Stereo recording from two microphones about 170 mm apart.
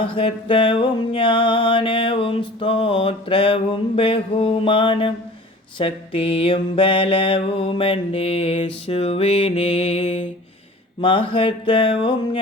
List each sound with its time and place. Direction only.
0.0 s mantra: 30° left (ahead or behind)